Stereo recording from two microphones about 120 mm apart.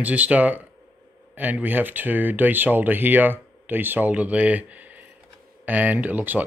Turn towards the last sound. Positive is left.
turn(degrees=-15)  # may be behind; listen again after turning